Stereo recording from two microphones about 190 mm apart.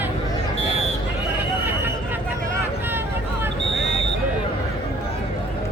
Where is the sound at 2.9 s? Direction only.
10° right (ahead or behind).